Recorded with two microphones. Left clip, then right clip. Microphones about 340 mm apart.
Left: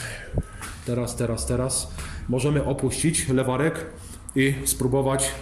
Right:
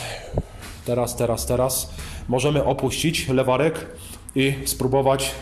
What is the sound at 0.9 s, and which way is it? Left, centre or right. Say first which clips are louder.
Speech: right 6 dB; centre.